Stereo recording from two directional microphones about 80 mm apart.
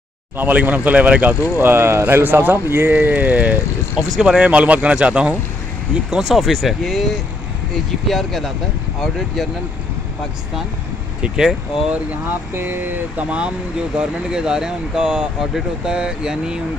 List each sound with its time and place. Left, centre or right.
0.4 s speech: right
1.6 s speech: right; by 7.1 s centre
8.1 s speech: centre
11.2 s speech: centre
11.9 s speech: right
13.9 s speech: centre